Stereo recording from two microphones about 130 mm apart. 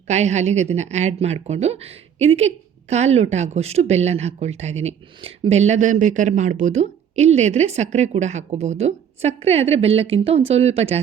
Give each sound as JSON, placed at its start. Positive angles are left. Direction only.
{"t": 0.1, "sound": "speech", "side_deg": -60}